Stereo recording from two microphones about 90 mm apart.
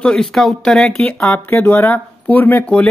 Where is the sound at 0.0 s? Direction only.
5° left (ahead or behind).